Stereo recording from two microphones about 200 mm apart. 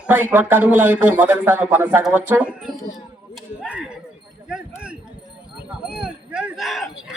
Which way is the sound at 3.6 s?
5° right (ahead or behind).